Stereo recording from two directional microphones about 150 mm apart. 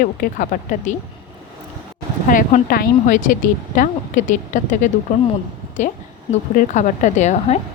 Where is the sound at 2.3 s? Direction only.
65° left (ahead or behind).